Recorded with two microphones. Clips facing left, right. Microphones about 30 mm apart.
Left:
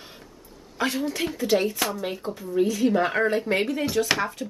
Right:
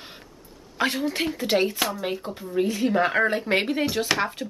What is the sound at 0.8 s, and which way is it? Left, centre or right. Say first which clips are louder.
Speech: right 1 dB; right.